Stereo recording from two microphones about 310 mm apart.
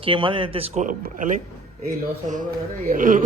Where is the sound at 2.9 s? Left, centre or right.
Right.